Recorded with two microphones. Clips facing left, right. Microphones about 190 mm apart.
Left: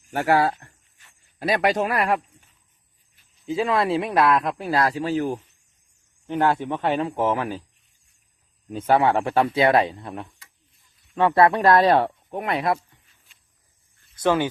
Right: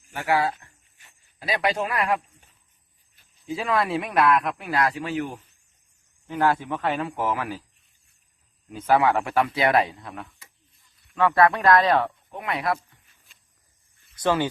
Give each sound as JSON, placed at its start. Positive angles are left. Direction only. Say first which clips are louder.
{"t": 0.1, "sound": "speech", "louder": "left 4 dB", "side_deg": 45}
{"t": 3.4, "sound": "speech", "louder": "left 3 dB", "side_deg": 25}
{"t": 6.2, "sound": "speech", "louder": "left 2 dB", "side_deg": 25}
{"t": 8.7, "sound": "speech", "louder": "left 1 dB", "side_deg": 30}
{"t": 12.5, "sound": "speech", "louder": "left 2 dB", "side_deg": 25}
{"t": 14.2, "sound": "speech", "louder": "left 2 dB", "side_deg": 15}